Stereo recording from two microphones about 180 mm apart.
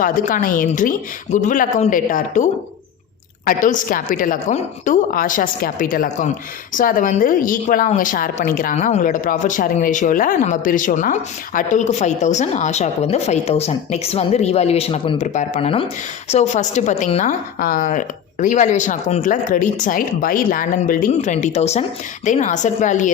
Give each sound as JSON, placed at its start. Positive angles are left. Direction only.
{"t": 0.0, "sound": "a woman's voice", "side_deg": 50}